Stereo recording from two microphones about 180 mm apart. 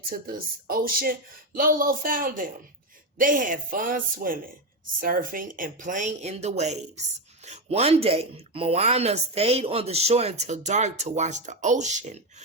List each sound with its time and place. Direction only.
0.1 s speech: 55° right (ahead or behind)